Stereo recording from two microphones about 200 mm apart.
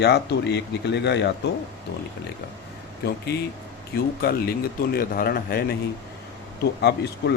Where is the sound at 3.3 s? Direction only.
55° left (ahead or behind).